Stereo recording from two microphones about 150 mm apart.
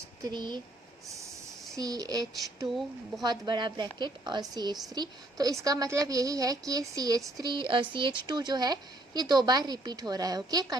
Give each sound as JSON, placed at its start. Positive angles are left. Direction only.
{"t": 0.2, "sound": "a woman's voice", "side_deg": -30}
{"t": 1.7, "sound": "a woman's voice", "side_deg": -25}
{"t": 2.6, "sound": "speech", "side_deg": 0}
{"t": 3.2, "sound": "a woman's voice", "side_deg": -30}